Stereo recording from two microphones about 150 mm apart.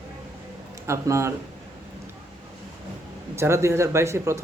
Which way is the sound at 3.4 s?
20° right (ahead or behind).